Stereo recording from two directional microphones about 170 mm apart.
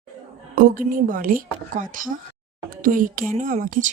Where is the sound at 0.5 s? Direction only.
55° right (ahead or behind).